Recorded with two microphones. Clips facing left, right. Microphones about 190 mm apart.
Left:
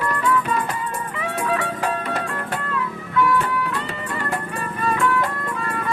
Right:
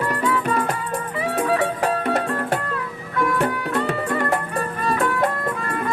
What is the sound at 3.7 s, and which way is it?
Music, 40° right (ahead or behind).